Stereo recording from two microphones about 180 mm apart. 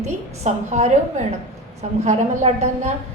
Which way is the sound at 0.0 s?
40° right (ahead or behind).